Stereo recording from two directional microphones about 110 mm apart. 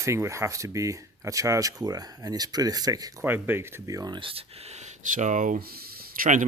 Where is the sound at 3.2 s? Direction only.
20° right (ahead or behind).